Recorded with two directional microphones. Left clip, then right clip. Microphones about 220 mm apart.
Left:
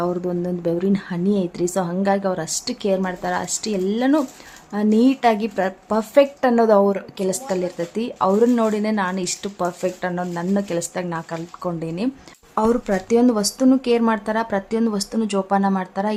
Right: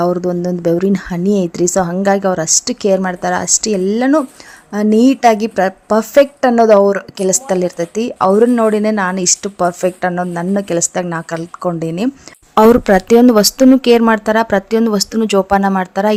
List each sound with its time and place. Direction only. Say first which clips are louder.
0.0 s a woman's voice: right 8 dB; 35° right (ahead or behind)